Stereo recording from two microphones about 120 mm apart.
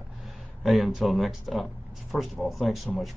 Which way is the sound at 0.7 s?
Centre (ahead or behind).